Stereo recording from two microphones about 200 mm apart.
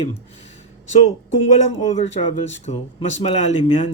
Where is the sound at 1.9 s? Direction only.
35° left (ahead or behind).